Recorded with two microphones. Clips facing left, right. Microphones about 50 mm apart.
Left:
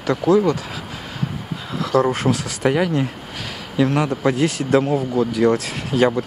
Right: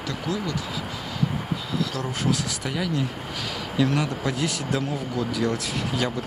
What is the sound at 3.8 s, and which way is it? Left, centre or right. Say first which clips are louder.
Speech: left 6 dB; left.